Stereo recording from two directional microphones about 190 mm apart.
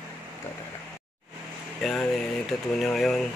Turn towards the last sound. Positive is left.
turn(degrees=0)  # may be behind; listen again after turning